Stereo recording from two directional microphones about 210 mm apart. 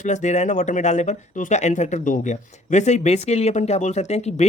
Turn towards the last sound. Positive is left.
turn(degrees=30)  # may be behind; listen again after turning